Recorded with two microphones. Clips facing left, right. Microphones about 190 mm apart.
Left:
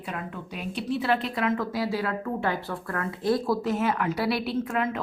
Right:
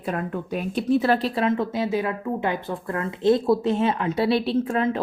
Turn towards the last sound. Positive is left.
turn(degrees=-30)  # may be behind; listen again after turning